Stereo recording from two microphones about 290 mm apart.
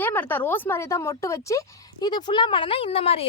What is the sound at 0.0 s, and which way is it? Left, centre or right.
Speech, centre.